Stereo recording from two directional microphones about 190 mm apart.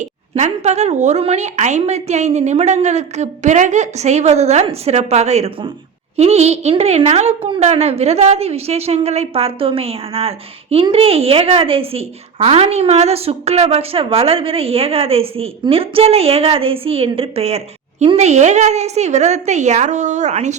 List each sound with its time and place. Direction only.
0.0 s a woman's voice: 40° right (ahead or behind)